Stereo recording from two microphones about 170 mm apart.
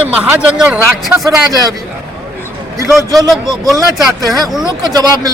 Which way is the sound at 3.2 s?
25° right (ahead or behind).